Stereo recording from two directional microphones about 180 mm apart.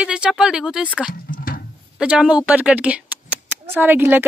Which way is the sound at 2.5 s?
5° right (ahead or behind).